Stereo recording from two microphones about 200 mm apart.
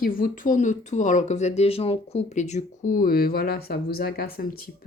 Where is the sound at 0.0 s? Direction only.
45° left (ahead or behind).